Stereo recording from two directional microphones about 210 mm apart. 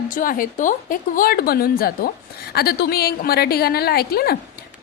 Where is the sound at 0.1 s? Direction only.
40° left (ahead or behind).